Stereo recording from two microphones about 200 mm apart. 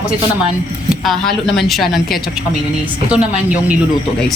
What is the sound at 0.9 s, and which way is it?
Speech, centre (ahead or behind).